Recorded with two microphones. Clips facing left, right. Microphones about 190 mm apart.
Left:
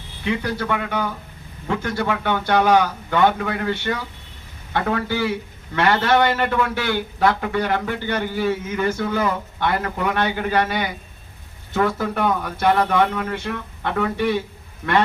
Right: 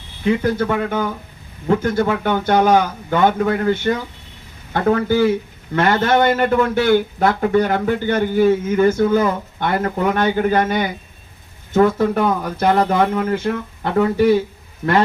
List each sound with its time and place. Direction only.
0.3 s a man's voice: 40° right (ahead or behind)
2.7 s speech: 20° right (ahead or behind)
3.2 s a man's voice: 40° right (ahead or behind)
11.9 s speech: 30° right (ahead or behind)